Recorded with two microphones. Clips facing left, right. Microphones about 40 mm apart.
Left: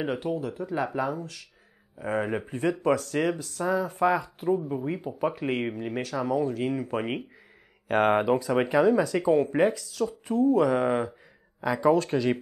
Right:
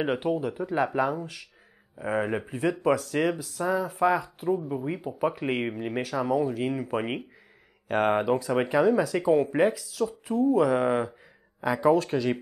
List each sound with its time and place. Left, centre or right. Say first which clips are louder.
0.0 s speech: right 3 dB; centre